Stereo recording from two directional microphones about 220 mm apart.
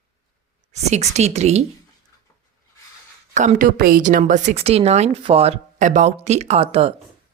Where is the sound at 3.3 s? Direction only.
35° right (ahead or behind).